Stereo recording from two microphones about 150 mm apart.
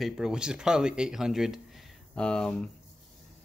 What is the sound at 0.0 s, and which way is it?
Speech, 5° right (ahead or behind).